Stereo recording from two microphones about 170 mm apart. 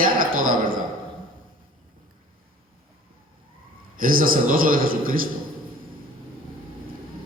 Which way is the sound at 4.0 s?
55° right (ahead or behind).